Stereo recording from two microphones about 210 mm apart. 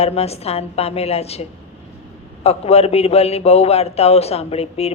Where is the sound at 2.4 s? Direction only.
30° left (ahead or behind).